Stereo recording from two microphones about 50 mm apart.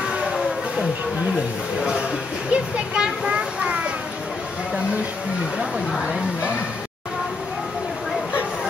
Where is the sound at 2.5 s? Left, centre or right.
Centre.